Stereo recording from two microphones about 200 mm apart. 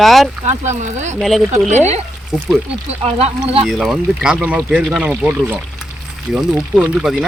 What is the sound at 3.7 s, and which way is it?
Speech, centre (ahead or behind).